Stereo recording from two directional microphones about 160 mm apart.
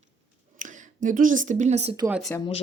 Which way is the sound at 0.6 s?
50° right (ahead or behind).